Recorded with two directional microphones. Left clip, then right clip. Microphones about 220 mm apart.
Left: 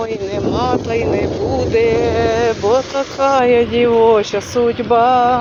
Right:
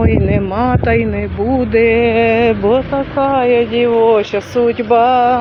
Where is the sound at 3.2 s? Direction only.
10° left (ahead or behind).